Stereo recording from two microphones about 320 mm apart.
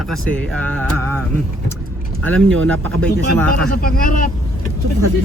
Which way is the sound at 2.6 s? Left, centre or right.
Centre.